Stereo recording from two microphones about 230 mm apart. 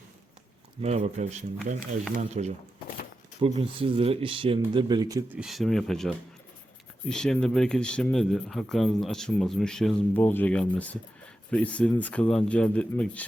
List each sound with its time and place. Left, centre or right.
0.8 s speech: right
3.6 s speech: right
5.4 s speech: centre